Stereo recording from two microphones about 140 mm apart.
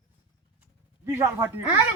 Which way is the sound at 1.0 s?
20° right (ahead or behind).